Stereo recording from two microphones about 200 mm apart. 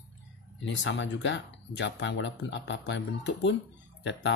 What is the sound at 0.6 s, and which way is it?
Speech, 70° left (ahead or behind).